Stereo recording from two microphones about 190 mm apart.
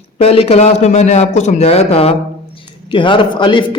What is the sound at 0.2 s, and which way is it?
A man's voice, 30° left (ahead or behind).